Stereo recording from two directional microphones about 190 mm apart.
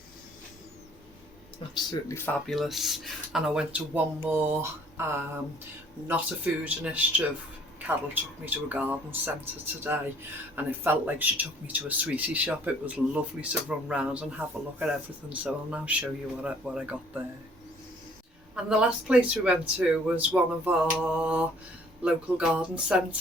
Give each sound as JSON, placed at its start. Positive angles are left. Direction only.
{"t": 1.7, "sound": "speech", "side_deg": 20}
{"t": 2.5, "sound": "speech", "side_deg": 0}
{"t": 18.5, "sound": "speech", "side_deg": -5}